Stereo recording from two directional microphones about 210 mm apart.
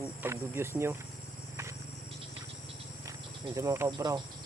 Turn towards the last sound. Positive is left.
turn(degrees=-20)  # may be behind; listen again after turning